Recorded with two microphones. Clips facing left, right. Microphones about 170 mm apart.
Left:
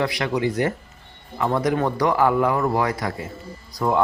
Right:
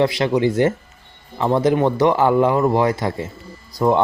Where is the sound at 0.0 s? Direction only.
25° right (ahead or behind).